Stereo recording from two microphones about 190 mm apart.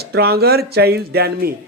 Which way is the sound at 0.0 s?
55° right (ahead or behind).